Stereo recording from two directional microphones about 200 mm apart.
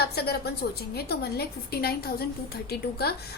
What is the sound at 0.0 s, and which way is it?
A woman's voice, 50° left (ahead or behind).